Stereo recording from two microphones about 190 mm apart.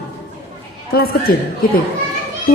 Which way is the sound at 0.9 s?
55° left (ahead or behind).